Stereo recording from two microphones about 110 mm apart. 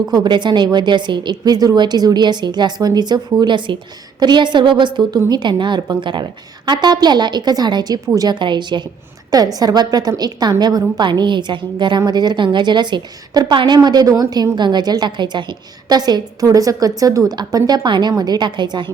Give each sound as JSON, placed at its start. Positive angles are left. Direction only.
{"t": 0.1, "sound": "a woman's voice", "side_deg": -40}